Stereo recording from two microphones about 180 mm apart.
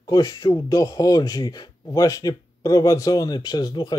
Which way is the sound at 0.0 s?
20° left (ahead or behind).